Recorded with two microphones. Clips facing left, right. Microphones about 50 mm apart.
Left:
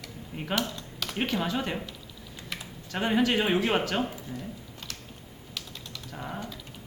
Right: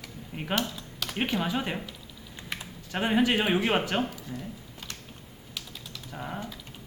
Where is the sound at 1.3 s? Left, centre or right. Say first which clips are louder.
Even; centre.